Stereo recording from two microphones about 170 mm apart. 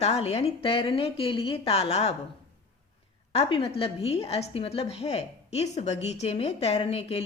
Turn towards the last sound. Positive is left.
turn(degrees=35)  # may be behind; listen again after turning